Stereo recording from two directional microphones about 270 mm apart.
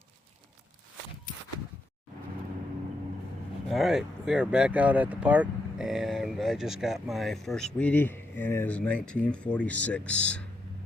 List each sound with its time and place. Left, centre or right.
3.7 s speech: centre